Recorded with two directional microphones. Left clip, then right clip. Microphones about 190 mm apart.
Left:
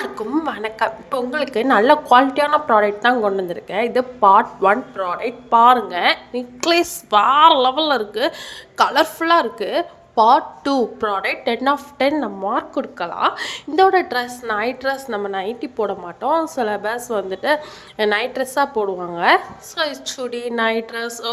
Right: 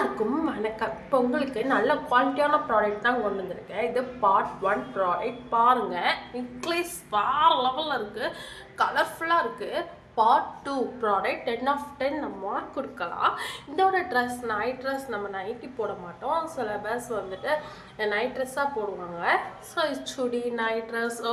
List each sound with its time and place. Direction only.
0.0 s a woman's voice: 45° left (ahead or behind)